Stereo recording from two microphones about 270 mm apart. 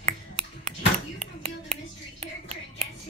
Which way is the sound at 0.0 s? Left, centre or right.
Right.